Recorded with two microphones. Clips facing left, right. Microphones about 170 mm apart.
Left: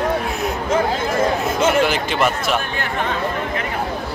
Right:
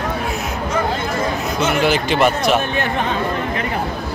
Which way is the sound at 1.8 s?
Centre (ahead or behind).